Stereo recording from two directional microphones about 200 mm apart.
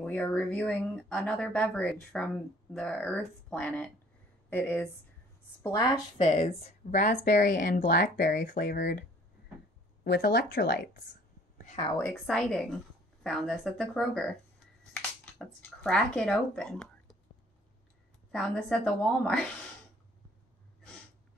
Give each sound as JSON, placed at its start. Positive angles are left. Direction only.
{"t": 0.0, "sound": "speech", "side_deg": 10}
{"t": 6.2, "sound": "speech", "side_deg": 35}
{"t": 10.0, "sound": "speech", "side_deg": 55}
{"t": 11.5, "sound": "a sound", "side_deg": 40}
{"t": 12.0, "sound": "a woman's voice", "side_deg": 5}
{"t": 15.3, "sound": "speech", "side_deg": 5}
{"t": 18.3, "sound": "a woman's voice", "side_deg": 5}